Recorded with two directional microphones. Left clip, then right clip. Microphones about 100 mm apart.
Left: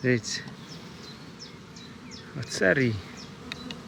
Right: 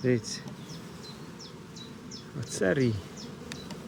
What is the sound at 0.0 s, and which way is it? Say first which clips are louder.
Bee: left 2 dB; 5° right (ahead or behind).